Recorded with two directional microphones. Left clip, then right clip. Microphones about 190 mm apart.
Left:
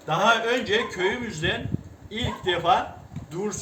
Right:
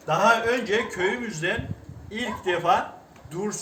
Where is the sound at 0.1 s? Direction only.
15° right (ahead or behind).